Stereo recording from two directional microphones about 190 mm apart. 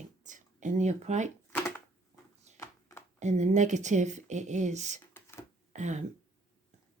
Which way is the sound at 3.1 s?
40° right (ahead or behind).